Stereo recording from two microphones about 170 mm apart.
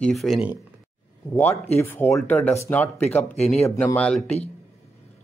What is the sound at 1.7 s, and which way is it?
Speech, 15° left (ahead or behind).